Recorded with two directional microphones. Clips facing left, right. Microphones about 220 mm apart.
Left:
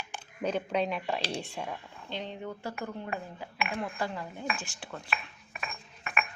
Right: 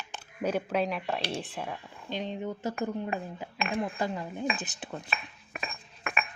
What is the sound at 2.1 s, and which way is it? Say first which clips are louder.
Speech: right 4 dB; 15° right (ahead or behind).